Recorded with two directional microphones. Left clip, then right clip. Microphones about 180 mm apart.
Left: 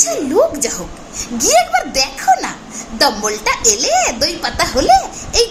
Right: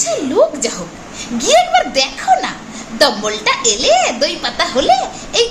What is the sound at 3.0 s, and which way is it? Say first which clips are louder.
Speech: right 1 dB; 20° left (ahead or behind).